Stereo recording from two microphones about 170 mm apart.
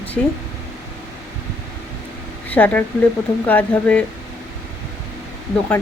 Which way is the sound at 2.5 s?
10° left (ahead or behind).